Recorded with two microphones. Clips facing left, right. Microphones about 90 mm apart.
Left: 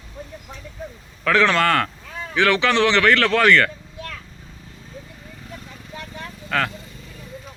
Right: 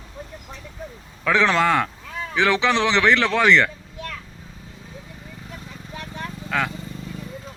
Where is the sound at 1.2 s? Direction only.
15° right (ahead or behind).